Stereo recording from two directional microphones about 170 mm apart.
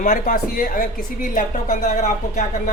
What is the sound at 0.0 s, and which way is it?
Speech, 55° left (ahead or behind).